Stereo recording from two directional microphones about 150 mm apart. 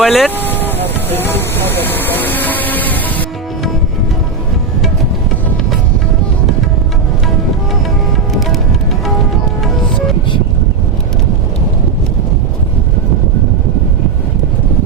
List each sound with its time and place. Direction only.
0.0 s speech: centre (ahead or behind)
0.3 s vehicle: 15° left (ahead or behind)
1.1 s speech: 15° left (ahead or behind)
1.8 s music: 15° left (ahead or behind)